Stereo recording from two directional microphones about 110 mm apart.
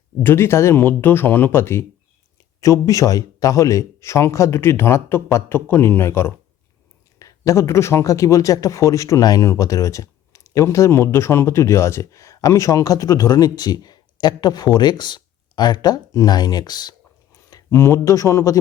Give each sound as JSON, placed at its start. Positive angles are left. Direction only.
{"t": 0.2, "sound": "speech", "side_deg": 25}
{"t": 17.3, "sound": "speech", "side_deg": 30}